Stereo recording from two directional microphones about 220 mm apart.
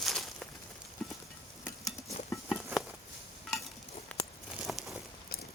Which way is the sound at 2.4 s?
Centre (ahead or behind).